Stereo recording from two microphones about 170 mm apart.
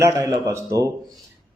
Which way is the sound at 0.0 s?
15° right (ahead or behind).